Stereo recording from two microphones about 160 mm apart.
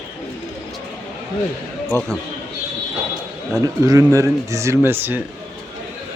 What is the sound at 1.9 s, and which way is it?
Speech, 20° right (ahead or behind).